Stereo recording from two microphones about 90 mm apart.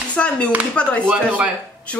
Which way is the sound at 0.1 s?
15° left (ahead or behind).